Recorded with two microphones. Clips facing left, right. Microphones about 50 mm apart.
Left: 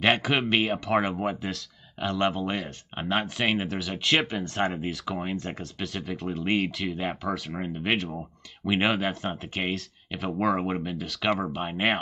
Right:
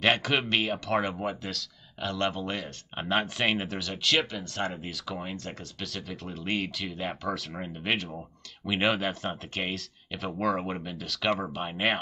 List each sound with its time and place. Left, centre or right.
0.0 s speech: centre
6.6 s speech: centre